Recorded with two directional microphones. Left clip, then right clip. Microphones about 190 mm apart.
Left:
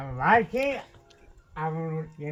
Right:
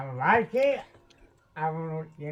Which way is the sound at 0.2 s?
45° left (ahead or behind).